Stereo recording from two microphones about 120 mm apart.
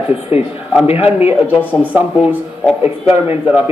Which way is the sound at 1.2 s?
15° right (ahead or behind).